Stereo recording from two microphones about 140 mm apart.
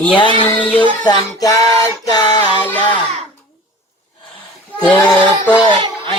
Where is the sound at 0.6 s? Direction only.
10° left (ahead or behind).